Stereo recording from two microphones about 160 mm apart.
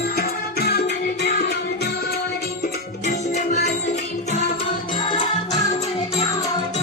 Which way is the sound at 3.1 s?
50° left (ahead or behind).